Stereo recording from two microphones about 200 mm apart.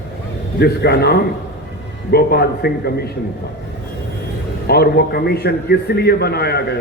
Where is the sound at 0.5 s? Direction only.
55° left (ahead or behind).